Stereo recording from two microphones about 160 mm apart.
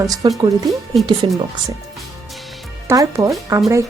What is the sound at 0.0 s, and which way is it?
Speech, 20° right (ahead or behind).